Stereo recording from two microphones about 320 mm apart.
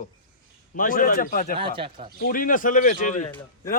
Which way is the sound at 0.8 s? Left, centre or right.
Left.